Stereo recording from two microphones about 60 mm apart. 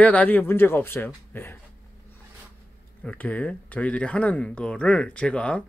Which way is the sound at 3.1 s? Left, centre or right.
Left.